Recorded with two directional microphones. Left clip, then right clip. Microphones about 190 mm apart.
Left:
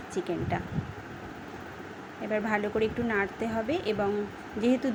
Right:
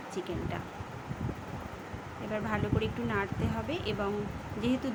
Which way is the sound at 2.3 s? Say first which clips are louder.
Left 5 dB; 20° left (ahead or behind).